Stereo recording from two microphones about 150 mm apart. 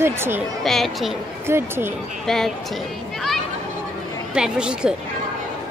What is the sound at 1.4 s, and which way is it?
Speech, 15° right (ahead or behind).